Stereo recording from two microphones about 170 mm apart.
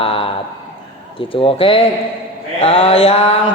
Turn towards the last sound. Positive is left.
turn(degrees=35)  # may be behind; listen again after turning